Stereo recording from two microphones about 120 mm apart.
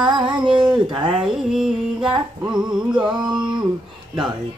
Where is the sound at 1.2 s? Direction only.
5° right (ahead or behind).